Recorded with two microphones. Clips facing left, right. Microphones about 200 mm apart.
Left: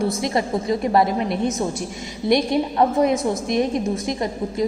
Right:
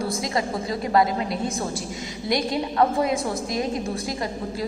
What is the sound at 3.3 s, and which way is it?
Speech, 25° left (ahead or behind).